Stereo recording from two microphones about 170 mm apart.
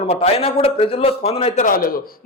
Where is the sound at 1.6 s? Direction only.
60° left (ahead or behind).